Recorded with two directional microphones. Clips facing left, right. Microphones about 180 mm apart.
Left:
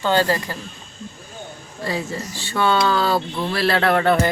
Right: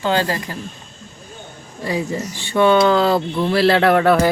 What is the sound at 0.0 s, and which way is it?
Speech, 15° right (ahead or behind).